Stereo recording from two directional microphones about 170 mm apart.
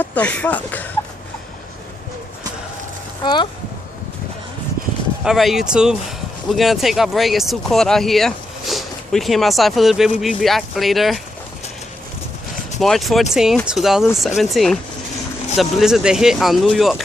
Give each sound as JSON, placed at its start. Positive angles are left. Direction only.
{"t": 0.0, "sound": "speech", "side_deg": 10}
{"t": 3.2, "sound": "speech", "side_deg": 25}
{"t": 4.8, "sound": "a sound", "side_deg": -55}
{"t": 5.2, "sound": "speech", "side_deg": 0}
{"t": 12.8, "sound": "speech", "side_deg": 0}